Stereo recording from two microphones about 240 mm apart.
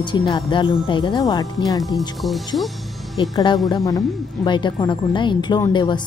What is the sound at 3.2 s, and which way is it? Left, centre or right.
Speech, centre.